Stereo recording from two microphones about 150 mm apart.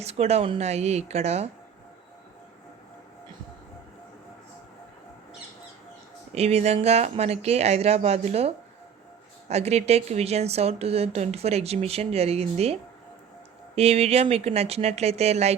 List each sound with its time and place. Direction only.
0.0 s speech: 45° right (ahead or behind)
6.3 s speech: 45° right (ahead or behind)